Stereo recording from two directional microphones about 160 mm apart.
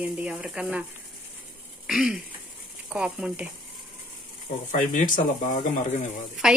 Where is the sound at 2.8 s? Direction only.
5° right (ahead or behind).